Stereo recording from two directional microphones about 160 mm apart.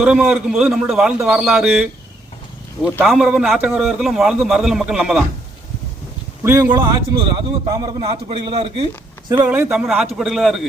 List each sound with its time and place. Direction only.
0.0 s a man's voice: 5° right (ahead or behind)
3.0 s a man's voice: 5° right (ahead or behind)
6.4 s speech: 15° right (ahead or behind)
7.2 s a man's voice: 30° right (ahead or behind)
9.4 s a man's voice: 10° right (ahead or behind)